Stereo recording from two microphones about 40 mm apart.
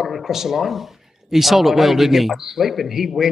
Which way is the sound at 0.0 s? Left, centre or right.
Centre.